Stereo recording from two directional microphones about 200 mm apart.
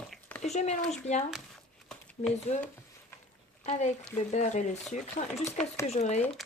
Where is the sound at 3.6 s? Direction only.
35° left (ahead or behind).